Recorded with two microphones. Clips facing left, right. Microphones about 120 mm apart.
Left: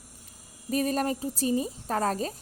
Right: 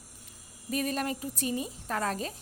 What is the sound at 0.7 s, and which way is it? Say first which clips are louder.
A woman's voice: left 4 dB; 35° left (ahead or behind).